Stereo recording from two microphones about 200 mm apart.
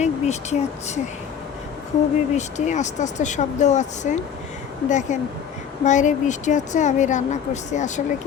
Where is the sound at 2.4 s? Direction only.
35° left (ahead or behind).